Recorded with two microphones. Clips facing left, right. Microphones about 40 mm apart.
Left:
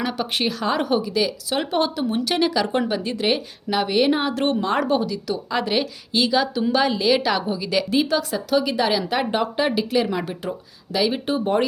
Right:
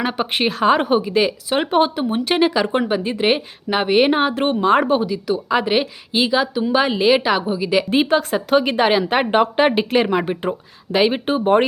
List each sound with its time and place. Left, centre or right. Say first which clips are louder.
0.0 s speech: right 4 dB; right
7.9 s speech: right 4 dB; right